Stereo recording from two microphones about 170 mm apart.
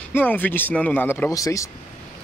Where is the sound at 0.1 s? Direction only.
10° left (ahead or behind).